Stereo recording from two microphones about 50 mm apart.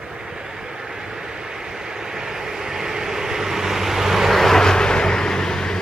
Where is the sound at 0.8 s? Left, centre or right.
Centre.